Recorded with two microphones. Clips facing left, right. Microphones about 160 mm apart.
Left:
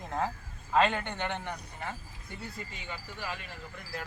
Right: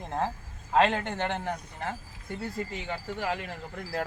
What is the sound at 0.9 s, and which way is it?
A man's voice, 40° right (ahead or behind).